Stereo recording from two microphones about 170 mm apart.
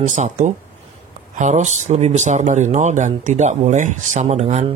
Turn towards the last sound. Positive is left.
turn(degrees=-40)  # may be behind; listen again after turning